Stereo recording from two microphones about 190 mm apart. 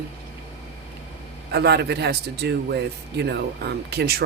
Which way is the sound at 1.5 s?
60° right (ahead or behind).